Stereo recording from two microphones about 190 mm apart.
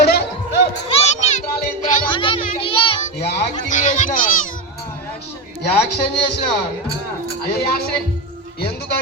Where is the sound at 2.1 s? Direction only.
25° left (ahead or behind).